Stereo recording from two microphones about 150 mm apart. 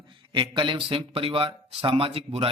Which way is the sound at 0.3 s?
35° right (ahead or behind).